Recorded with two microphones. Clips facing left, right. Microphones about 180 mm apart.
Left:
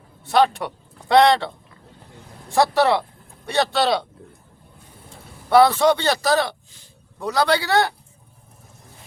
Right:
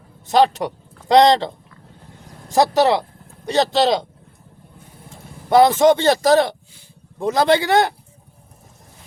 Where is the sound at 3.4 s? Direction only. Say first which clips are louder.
Right 3 dB; 20° right (ahead or behind).